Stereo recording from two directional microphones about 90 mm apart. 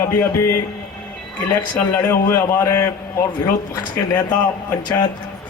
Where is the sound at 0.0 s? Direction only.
30° left (ahead or behind).